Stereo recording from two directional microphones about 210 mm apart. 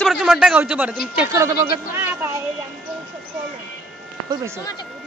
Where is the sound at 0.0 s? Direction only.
Centre (ahead or behind).